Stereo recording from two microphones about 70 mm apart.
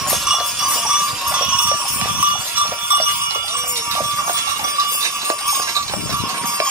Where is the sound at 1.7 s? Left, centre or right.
Right.